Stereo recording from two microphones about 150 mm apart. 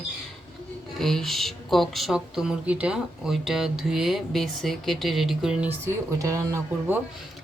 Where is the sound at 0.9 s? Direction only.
Centre (ahead or behind); by 7.0 s 15° right (ahead or behind).